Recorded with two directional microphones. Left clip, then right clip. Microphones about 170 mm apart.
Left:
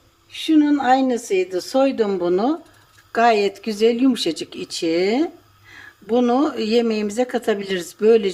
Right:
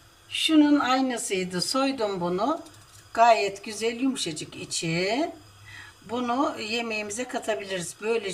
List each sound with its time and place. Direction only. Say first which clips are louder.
0.3 s speech: left 3 dB; 35° left (ahead or behind); by 2.6 s 50° left (ahead or behind)
3.1 s speech: left 3 dB; 65° left (ahead or behind)